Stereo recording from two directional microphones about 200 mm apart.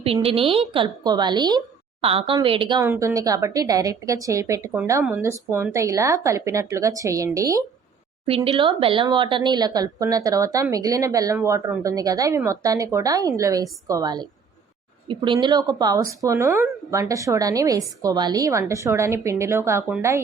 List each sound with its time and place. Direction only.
0.0 s a woman's voice: 30° right (ahead or behind); by 20.2 s 15° right (ahead or behind)